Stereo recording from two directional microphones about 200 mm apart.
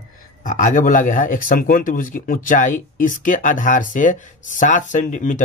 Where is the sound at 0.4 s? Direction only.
40° left (ahead or behind).